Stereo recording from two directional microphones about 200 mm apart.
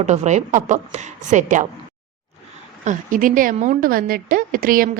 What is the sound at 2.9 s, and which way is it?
A woman's voice, 40° right (ahead or behind).